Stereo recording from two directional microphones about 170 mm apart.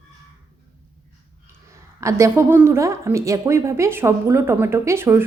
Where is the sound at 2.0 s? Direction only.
20° right (ahead or behind).